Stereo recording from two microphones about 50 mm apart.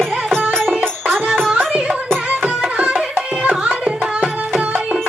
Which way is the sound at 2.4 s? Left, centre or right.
Right.